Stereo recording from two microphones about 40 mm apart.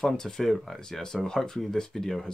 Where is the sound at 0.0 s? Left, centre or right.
Centre.